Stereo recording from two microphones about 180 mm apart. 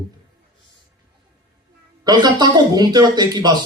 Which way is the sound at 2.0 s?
25° right (ahead or behind).